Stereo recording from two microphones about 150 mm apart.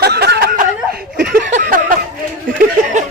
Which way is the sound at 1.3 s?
65° right (ahead or behind).